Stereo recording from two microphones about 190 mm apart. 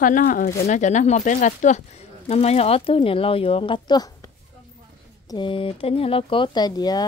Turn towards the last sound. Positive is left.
turn(degrees=20)  # may be behind; listen again after turning